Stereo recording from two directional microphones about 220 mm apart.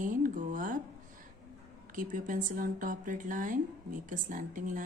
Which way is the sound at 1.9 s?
35° right (ahead or behind).